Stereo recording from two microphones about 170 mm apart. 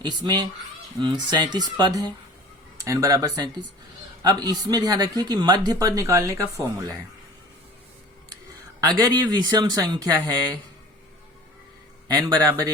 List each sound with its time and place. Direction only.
0.0 s speech: 25° right (ahead or behind)
8.8 s speech: 20° right (ahead or behind)
12.0 s speech: 25° right (ahead or behind)